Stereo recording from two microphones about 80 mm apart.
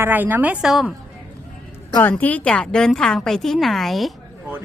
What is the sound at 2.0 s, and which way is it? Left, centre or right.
Speech, left.